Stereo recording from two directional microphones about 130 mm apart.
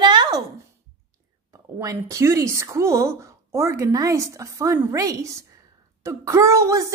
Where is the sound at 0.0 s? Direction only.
35° right (ahead or behind).